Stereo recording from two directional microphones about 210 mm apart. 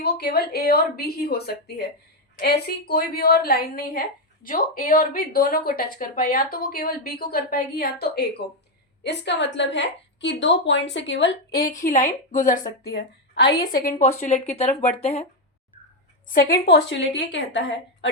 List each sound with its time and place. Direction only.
0.0 s a woman's voice: 50° left (ahead or behind)
11.6 s a woman's voice: 40° left (ahead or behind)
14.1 s speech: 30° left (ahead or behind)
16.3 s a woman's voice: 45° left (ahead or behind)